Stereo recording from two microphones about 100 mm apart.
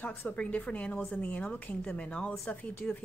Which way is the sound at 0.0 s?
20° left (ahead or behind).